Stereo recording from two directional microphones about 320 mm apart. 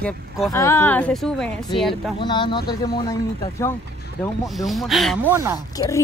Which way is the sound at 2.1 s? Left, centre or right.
Centre.